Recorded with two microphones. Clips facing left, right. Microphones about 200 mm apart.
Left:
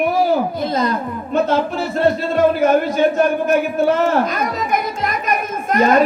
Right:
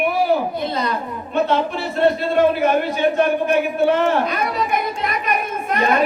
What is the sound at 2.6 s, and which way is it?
Speech, 45° left (ahead or behind).